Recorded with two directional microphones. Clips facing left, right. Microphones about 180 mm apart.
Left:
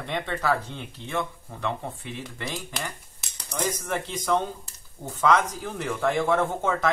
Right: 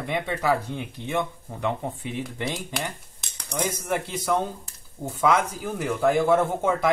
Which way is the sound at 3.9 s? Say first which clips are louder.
Right 1 dB; 10° right (ahead or behind).